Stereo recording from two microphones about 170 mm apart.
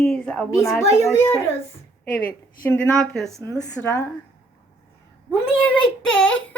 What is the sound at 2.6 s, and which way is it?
A woman's voice, 10° left (ahead or behind).